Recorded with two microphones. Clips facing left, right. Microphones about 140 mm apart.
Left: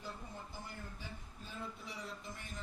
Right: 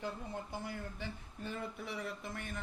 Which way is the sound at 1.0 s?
70° right (ahead or behind).